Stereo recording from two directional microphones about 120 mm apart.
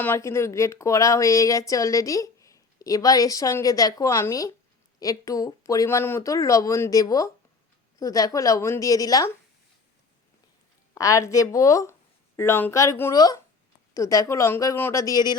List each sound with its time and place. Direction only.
0.0 s speech: 20° left (ahead or behind)
10.9 s speech: 25° left (ahead or behind)